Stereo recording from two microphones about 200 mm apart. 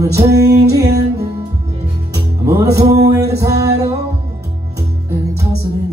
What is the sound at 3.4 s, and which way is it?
Music, 15° right (ahead or behind).